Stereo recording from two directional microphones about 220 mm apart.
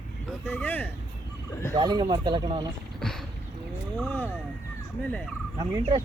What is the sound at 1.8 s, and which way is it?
Speech, 20° right (ahead or behind).